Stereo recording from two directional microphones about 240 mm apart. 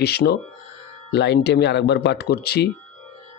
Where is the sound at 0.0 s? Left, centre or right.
Left.